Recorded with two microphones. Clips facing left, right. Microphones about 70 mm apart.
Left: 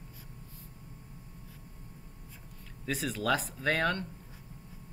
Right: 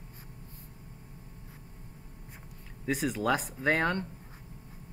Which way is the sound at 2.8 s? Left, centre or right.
Centre.